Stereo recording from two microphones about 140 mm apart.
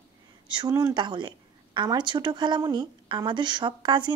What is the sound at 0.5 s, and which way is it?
A woman's voice, 30° right (ahead or behind).